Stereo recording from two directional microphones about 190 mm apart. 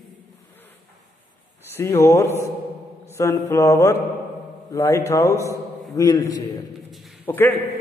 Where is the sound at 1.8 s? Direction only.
15° left (ahead or behind).